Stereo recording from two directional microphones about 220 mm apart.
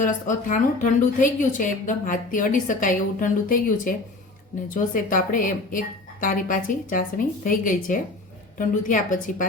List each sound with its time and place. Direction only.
0.0 s speech: 35° left (ahead or behind)